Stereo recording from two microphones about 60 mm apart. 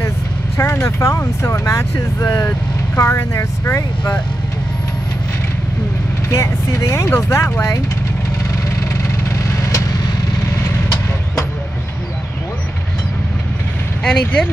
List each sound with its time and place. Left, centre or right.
0.6 s speech: left
3.0 s speech: left
6.3 s speech: left
14.0 s speech: centre